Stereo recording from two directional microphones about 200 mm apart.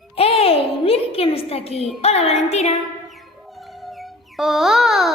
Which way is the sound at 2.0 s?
30° left (ahead or behind).